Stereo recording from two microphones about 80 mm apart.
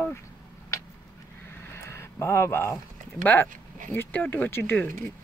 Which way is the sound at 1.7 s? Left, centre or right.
Left.